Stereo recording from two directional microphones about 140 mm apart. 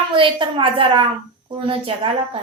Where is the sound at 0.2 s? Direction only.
35° right (ahead or behind).